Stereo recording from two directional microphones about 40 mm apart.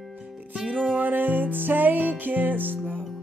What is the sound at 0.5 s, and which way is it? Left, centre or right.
Music, right.